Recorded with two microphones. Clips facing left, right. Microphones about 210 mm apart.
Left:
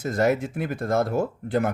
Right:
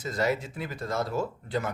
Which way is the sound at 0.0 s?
50° left (ahead or behind).